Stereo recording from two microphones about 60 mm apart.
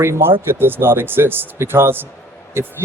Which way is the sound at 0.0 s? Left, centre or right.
Right.